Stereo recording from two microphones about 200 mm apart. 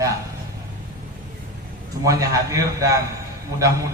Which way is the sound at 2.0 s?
15° right (ahead or behind).